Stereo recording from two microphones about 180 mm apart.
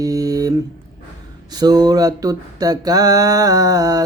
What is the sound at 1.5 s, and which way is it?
Music, 20° right (ahead or behind).